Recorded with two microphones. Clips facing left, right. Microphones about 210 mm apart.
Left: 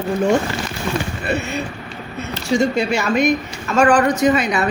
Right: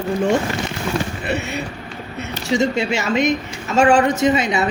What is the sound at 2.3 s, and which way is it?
Speech, 20° right (ahead or behind).